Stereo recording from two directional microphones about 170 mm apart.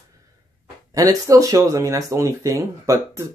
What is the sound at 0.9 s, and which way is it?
Speech, 20° right (ahead or behind).